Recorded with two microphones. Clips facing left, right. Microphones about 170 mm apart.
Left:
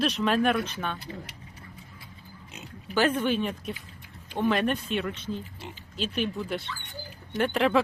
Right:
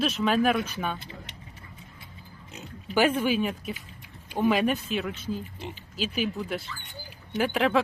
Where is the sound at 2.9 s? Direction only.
10° right (ahead or behind).